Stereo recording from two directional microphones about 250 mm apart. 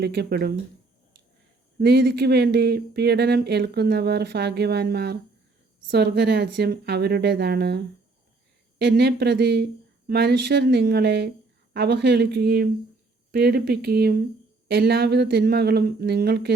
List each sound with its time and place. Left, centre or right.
0.0 s speech: right
1.8 s speech: right
8.8 s speech: right